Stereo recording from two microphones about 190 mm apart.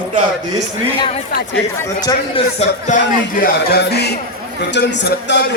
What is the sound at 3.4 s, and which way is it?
Music, 55° left (ahead or behind).